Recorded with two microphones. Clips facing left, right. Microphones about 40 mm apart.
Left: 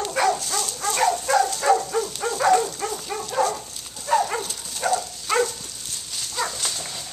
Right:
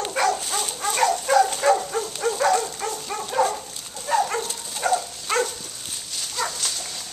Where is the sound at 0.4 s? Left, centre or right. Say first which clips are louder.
Even; right.